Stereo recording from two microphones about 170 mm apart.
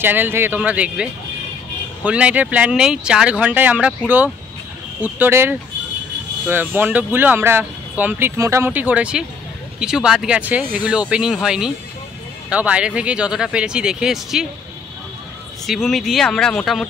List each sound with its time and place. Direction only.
0.0 s speech: 10° right (ahead or behind)
2.0 s speech: 5° right (ahead or behind)
5.0 s speech: 15° right (ahead or behind)
15.6 s speech: centre (ahead or behind)